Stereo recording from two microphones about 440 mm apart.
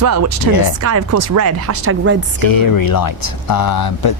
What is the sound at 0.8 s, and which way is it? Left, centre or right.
A woman's voice, right.